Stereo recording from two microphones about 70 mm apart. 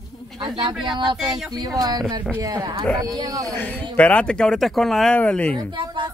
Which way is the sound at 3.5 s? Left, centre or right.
Left.